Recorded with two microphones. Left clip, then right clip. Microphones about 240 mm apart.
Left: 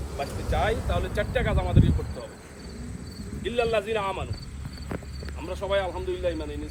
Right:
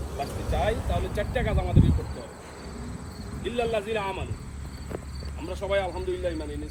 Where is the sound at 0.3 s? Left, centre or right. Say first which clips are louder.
Right 1 dB; right.